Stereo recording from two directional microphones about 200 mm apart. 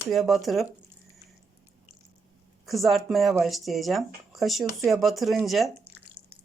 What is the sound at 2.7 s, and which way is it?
Speech, centre (ahead or behind).